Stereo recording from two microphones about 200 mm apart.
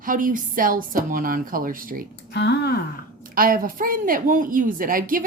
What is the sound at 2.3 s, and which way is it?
Speech, 55° left (ahead or behind).